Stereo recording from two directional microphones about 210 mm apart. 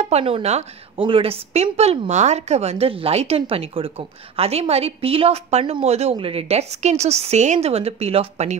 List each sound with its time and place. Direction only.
0.0 s a woman's voice: 30° right (ahead or behind)